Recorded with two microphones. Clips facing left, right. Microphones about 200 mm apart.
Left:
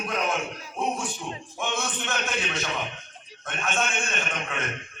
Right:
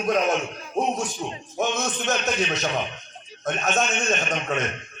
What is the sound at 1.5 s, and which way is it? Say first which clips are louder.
A man's voice: right 6 dB; 40° right (ahead or behind).